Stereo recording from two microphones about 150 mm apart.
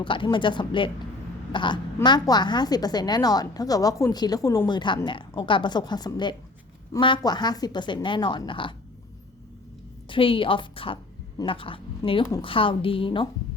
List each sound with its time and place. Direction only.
0.0 s a woman's voice: 35° left (ahead or behind)
10.1 s a woman's voice: 35° left (ahead or behind)